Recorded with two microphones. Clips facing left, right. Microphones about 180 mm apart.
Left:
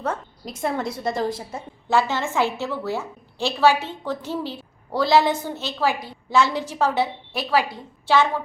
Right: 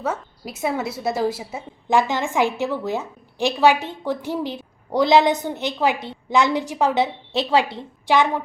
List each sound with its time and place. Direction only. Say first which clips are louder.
0.0 s a woman's voice: right 1 dB; 5° right (ahead or behind)